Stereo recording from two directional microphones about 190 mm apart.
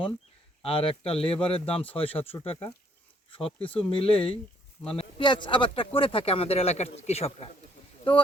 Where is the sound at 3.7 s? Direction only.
30° left (ahead or behind).